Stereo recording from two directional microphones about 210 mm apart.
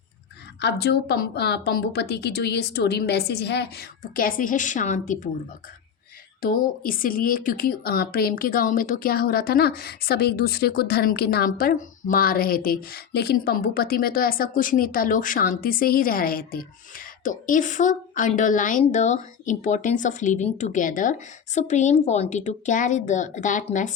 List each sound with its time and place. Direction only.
0.6 s speech: 50° left (ahead or behind)
6.4 s speech: 40° left (ahead or behind)